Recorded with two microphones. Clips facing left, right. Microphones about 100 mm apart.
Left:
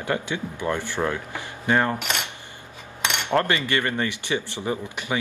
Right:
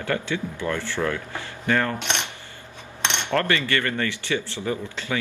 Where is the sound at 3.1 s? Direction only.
20° left (ahead or behind).